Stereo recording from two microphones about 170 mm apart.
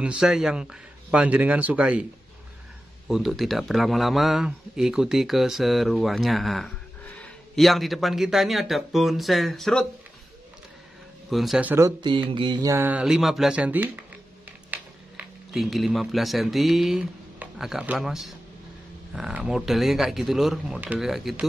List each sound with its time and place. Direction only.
0.0 s a man's voice: 5° right (ahead or behind)
3.1 s a man's voice: centre (ahead or behind)
11.2 s a man's voice: centre (ahead or behind)
12.0 s mantra: 30° right (ahead or behind)
12.7 s a man's voice: 10° right (ahead or behind)